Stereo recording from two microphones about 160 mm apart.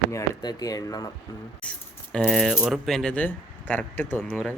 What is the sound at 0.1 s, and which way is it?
Speech, 20° left (ahead or behind).